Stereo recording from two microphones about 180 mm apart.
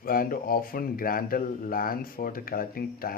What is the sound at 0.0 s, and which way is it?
Speech, 55° left (ahead or behind).